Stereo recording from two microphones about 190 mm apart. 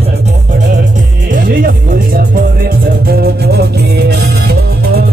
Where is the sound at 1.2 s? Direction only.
45° right (ahead or behind).